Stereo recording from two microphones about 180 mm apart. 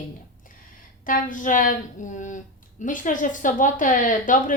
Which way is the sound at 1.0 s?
50° left (ahead or behind).